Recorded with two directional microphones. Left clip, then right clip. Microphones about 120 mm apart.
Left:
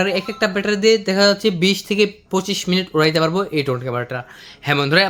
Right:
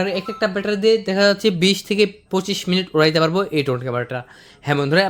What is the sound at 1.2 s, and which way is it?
Speech, 25° right (ahead or behind).